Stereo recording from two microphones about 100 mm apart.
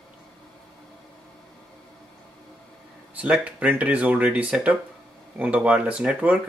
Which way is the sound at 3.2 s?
15° right (ahead or behind).